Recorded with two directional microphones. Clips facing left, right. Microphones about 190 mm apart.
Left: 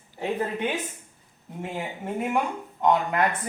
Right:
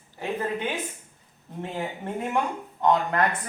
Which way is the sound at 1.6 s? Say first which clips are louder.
Right 1 dB; 10° left (ahead or behind).